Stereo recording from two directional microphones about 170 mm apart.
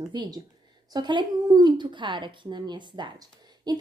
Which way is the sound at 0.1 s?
25° right (ahead or behind).